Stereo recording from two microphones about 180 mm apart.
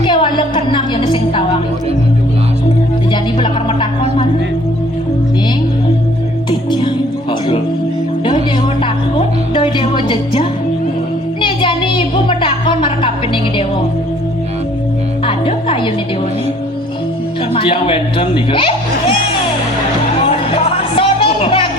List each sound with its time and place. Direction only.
0.0 s music: 25° left (ahead or behind)
3.1 s music: 30° left (ahead or behind)
6.5 s music: 25° left (ahead or behind)
8.8 s music: 30° left (ahead or behind)
11.3 s a sound: 30° left (ahead or behind)
15.3 s music: 30° left (ahead or behind)
17.5 s speech: 30° left (ahead or behind)
20.2 s music: 30° left (ahead or behind)